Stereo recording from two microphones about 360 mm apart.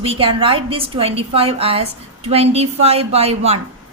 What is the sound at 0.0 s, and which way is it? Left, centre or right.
A woman's voice, centre.